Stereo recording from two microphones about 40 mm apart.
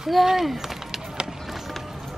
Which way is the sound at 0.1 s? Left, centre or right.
Centre.